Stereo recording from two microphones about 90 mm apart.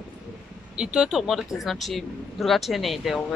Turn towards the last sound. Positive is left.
turn(degrees=0)  # may be behind; listen again after turning